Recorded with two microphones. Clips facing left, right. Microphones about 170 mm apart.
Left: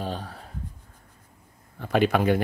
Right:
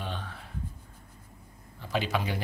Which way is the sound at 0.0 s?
40° left (ahead or behind).